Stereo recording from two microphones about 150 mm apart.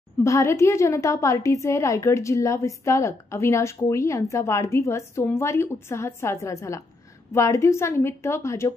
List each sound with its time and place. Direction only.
0.2 s a woman's voice: 20° left (ahead or behind)